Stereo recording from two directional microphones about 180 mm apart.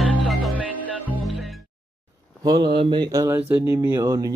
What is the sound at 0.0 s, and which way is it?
Music, centre (ahead or behind).